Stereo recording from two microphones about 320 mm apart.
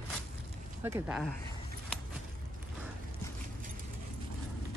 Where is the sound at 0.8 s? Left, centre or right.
Centre.